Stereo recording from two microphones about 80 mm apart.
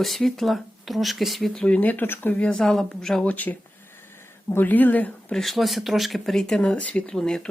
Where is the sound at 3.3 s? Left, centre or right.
Left.